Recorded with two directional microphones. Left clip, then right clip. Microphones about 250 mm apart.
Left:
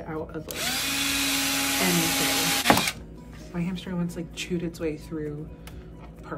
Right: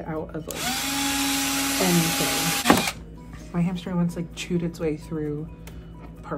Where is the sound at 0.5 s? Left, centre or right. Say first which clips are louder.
Even; centre.